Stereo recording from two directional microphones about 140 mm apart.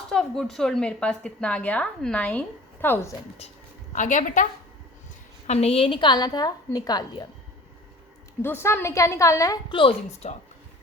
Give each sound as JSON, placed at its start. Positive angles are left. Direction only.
{"t": 0.1, "sound": "a woman's voice", "side_deg": 5}
{"t": 3.9, "sound": "a woman's voice", "side_deg": 60}
{"t": 5.5, "sound": "a woman's voice", "side_deg": 50}
{"t": 8.4, "sound": "a woman's voice", "side_deg": 20}
{"t": 9.7, "sound": "a woman's voice", "side_deg": 40}